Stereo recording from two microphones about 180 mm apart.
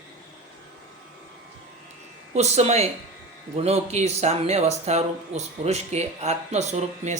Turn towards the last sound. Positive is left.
turn(degrees=-40)  # may be behind; listen again after turning